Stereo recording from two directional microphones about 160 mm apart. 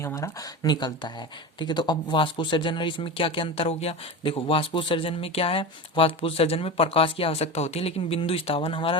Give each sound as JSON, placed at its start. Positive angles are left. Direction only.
{"t": 0.0, "sound": "speech", "side_deg": 20}